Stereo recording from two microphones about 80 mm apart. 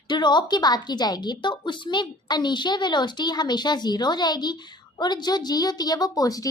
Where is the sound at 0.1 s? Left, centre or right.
Left.